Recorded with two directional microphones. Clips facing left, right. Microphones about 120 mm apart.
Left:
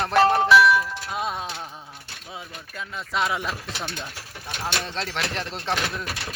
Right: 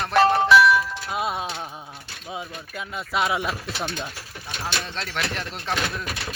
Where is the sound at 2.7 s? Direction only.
10° right (ahead or behind).